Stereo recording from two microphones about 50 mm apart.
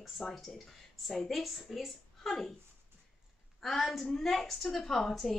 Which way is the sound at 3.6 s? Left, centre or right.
Centre.